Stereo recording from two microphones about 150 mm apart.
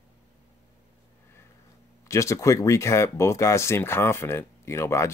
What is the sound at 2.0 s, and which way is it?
Speech, 20° left (ahead or behind).